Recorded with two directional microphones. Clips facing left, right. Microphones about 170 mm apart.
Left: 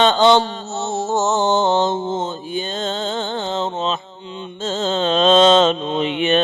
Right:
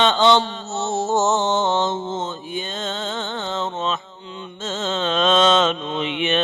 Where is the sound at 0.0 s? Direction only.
40° left (ahead or behind).